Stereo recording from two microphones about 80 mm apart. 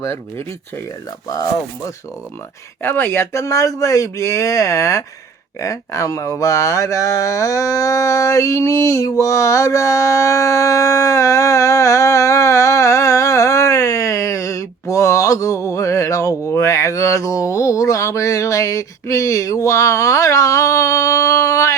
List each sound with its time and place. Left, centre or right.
0.0 s speech: left
1.3 s speech: left
2.8 s speech: left